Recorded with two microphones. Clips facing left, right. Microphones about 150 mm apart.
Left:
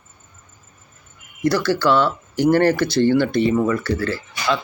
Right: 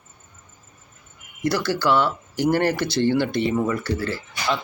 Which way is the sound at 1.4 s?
20° right (ahead or behind).